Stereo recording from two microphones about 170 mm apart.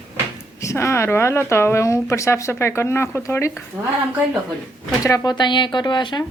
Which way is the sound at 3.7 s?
10° right (ahead or behind).